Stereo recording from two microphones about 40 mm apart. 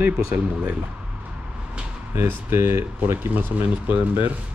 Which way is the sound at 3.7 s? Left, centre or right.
Right.